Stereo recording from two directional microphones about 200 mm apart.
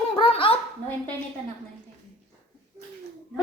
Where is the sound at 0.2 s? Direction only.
25° left (ahead or behind).